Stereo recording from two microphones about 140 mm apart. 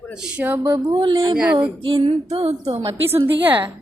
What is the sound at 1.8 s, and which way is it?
Speech, 40° right (ahead or behind).